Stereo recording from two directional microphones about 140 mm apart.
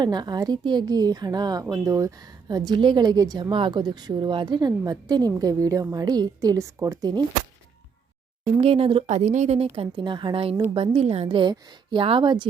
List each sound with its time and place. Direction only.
0.0 s a woman's voice: 30° right (ahead or behind)
8.5 s a woman's voice: 45° right (ahead or behind)